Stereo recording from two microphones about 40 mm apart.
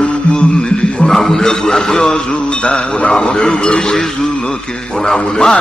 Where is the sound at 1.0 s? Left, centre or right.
Centre.